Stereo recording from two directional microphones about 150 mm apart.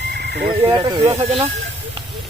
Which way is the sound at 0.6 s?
30° right (ahead or behind).